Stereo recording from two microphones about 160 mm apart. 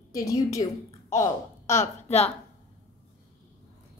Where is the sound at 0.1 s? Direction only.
20° left (ahead or behind).